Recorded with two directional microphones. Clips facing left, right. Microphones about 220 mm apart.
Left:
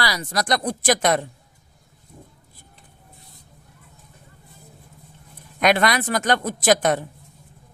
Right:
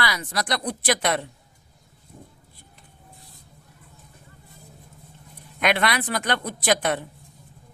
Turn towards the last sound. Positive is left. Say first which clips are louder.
# left 4 dB
turn(degrees=45)  # may be behind; listen again after turning